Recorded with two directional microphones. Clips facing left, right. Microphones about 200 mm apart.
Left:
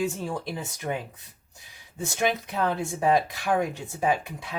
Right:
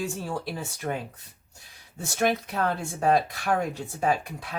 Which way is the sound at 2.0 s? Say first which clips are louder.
Right 1 dB; 20° left (ahead or behind).